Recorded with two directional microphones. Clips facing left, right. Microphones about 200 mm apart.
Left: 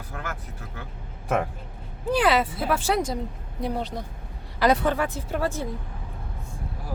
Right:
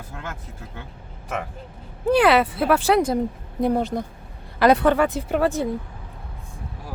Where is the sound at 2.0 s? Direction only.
60° right (ahead or behind).